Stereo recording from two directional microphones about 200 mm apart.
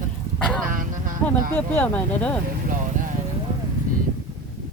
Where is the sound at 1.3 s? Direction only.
10° left (ahead or behind).